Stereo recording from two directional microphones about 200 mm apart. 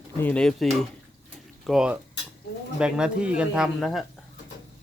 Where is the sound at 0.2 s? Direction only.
5° left (ahead or behind).